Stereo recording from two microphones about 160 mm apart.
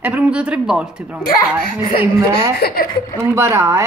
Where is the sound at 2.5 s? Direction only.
70° left (ahead or behind).